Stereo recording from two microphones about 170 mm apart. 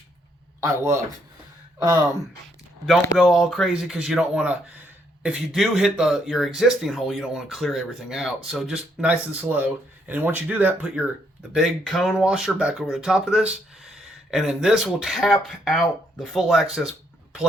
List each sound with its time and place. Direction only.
0.6 s speech: 15° right (ahead or behind)
3.2 s speech: centre (ahead or behind)